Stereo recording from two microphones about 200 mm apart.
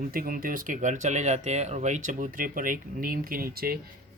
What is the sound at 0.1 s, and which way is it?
Speech, 45° right (ahead or behind).